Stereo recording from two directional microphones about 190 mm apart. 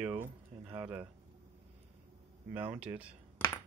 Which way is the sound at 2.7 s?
5° right (ahead or behind).